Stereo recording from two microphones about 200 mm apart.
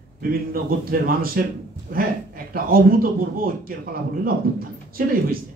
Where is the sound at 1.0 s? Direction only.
45° right (ahead or behind).